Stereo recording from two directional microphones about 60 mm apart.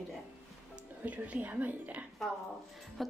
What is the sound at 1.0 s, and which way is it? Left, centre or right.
A woman's voice, right.